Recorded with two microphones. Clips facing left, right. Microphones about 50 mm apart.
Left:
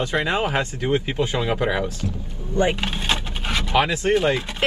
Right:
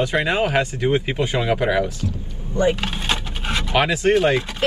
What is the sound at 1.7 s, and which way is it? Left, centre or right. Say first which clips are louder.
Speech: right 4 dB; left.